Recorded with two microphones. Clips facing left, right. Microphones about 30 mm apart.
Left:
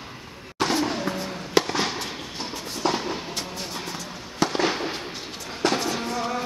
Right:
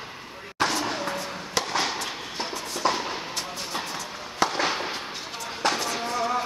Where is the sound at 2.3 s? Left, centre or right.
Centre.